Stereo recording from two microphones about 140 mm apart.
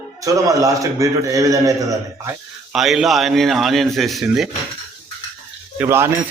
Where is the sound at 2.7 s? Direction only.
5° right (ahead or behind).